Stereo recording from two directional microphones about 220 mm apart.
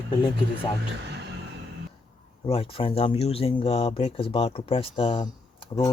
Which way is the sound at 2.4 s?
25° left (ahead or behind).